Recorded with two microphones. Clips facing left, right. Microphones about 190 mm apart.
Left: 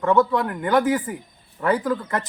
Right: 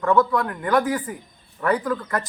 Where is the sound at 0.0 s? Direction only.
25° left (ahead or behind).